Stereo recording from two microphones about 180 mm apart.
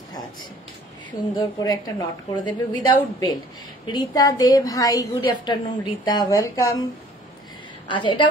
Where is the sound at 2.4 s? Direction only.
25° left (ahead or behind).